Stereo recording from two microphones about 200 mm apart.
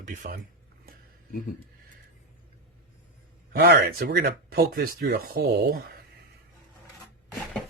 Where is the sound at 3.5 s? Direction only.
55° right (ahead or behind).